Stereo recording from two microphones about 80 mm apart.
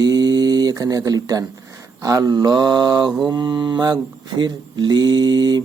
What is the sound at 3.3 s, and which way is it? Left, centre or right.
Mantra, right.